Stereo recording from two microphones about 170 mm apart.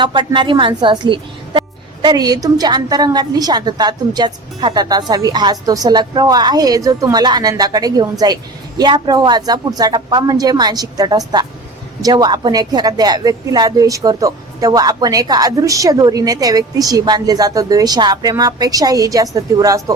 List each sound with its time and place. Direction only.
0.0 s a woman's voice: 25° right (ahead or behind)